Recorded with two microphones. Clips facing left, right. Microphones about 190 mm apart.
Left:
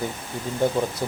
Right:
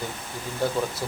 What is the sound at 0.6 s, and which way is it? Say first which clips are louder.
Speech: left 4 dB; 20° left (ahead or behind).